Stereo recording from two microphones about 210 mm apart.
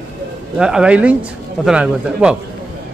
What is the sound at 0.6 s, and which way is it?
Speech, 5° right (ahead or behind).